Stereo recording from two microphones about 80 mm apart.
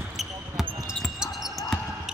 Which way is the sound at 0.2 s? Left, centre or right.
Centre.